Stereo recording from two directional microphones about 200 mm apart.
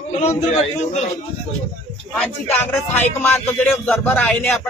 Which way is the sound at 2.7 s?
10° left (ahead or behind).